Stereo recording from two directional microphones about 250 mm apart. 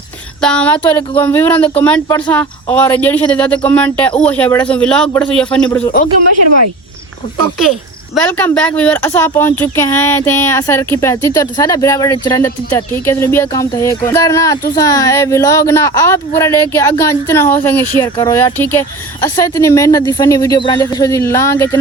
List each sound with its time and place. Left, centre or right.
0.4 s speech: centre
0.8 s speech: centre
5.8 s a man's voice: left
6.3 s speech: right
8.1 s speech: centre